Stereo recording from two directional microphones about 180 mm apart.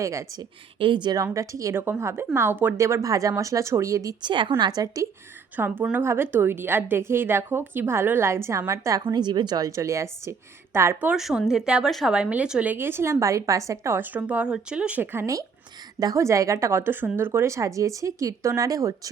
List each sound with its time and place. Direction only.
0.0 s a woman's voice: 15° right (ahead or behind)
0.8 s a woman's voice: 25° right (ahead or behind)
5.5 s a woman's voice: 10° right (ahead or behind)